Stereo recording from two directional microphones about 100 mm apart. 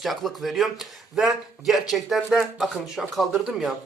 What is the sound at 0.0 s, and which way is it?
Speech, centre (ahead or behind).